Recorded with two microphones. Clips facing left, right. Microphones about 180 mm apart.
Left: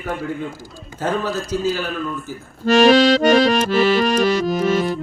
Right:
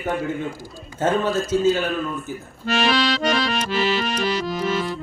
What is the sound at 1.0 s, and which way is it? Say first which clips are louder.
Speech: right 2 dB; 25° right (ahead or behind).